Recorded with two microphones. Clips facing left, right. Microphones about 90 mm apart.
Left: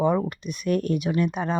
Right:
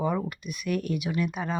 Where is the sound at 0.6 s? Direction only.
40° left (ahead or behind).